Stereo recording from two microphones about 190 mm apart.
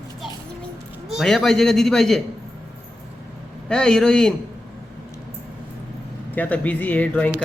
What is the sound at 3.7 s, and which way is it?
Speech, 5° left (ahead or behind).